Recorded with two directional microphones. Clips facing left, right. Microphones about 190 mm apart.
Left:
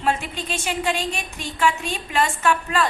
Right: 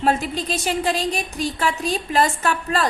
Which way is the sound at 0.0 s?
40° right (ahead or behind).